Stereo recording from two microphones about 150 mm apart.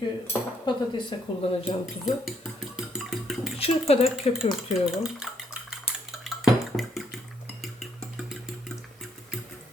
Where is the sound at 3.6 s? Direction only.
40° left (ahead or behind).